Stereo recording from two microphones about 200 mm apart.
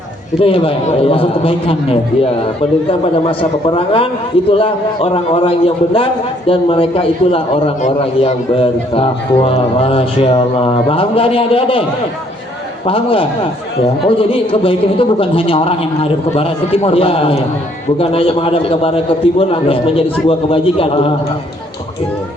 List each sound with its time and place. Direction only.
0.3 s a man's voice: 25° left (ahead or behind)
3.2 s a man's voice: 25° left (ahead or behind)